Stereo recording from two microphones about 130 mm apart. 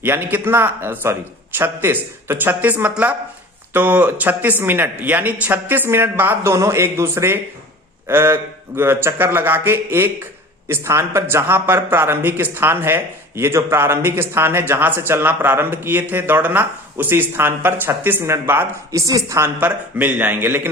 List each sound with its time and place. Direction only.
0.0 s speech: 15° right (ahead or behind)
18.9 s speech: 25° right (ahead or behind)